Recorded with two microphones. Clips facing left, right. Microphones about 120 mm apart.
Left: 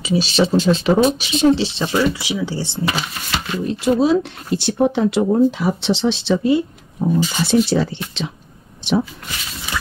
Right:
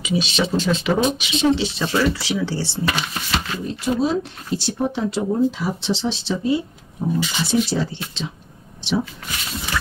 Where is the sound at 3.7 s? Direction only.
75° left (ahead or behind).